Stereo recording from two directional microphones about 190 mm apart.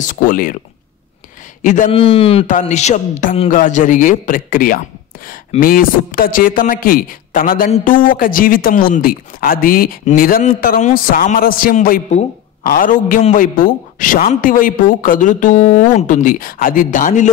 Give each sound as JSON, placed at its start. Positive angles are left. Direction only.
{"t": 0.0, "sound": "speech", "side_deg": 45}
{"t": 1.6, "sound": "speech", "side_deg": 40}
{"t": 1.9, "sound": "a man's voice", "side_deg": 30}